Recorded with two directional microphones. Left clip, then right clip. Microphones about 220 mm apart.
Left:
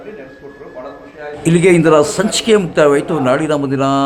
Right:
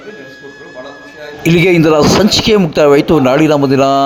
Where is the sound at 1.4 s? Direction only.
25° right (ahead or behind).